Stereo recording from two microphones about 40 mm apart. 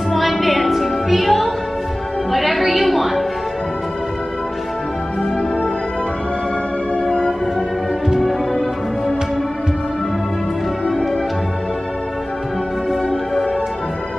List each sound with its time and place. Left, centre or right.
0.1 s music: centre
7.1 s music: left